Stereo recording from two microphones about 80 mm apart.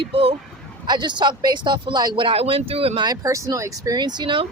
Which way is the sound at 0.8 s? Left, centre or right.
Right.